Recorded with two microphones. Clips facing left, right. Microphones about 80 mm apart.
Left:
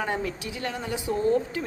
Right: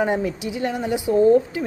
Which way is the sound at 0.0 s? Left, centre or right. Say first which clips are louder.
Right 7 dB; centre.